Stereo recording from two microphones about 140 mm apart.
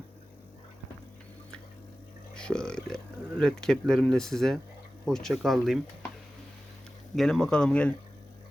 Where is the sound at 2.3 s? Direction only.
5° left (ahead or behind).